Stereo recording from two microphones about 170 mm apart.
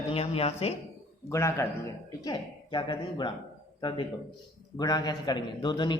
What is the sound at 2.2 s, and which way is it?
A man's voice, 30° left (ahead or behind).